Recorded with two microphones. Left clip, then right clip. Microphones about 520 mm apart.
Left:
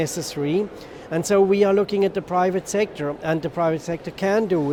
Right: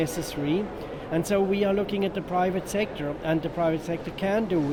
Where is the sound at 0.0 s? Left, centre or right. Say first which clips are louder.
Left 3 dB; left.